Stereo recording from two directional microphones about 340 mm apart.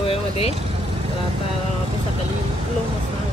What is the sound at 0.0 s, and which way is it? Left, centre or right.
Vehicle, centre.